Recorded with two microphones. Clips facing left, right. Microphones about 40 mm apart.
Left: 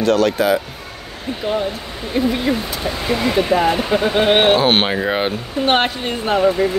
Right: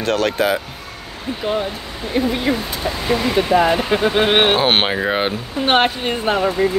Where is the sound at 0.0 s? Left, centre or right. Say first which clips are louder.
Left 3 dB; right.